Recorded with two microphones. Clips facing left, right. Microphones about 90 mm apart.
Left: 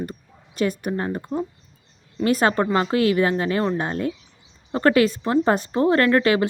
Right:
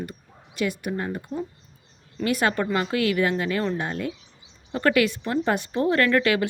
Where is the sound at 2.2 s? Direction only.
35° left (ahead or behind).